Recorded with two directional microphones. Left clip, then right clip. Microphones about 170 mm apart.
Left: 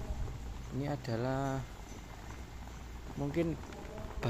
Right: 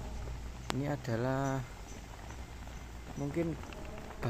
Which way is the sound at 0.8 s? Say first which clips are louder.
Even; 15° right (ahead or behind).